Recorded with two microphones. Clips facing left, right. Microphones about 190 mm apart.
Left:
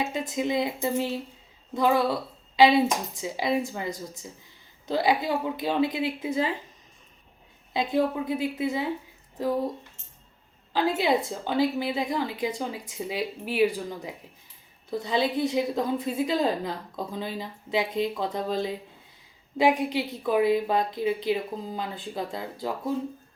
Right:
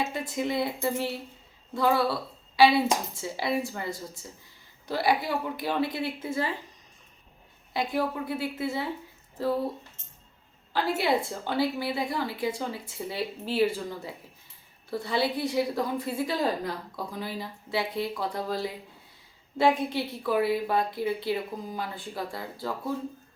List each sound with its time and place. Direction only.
0.0 s a woman's voice: 20° left (ahead or behind)
7.7 s a woman's voice: 20° left (ahead or behind)
10.7 s a woman's voice: 20° left (ahead or behind)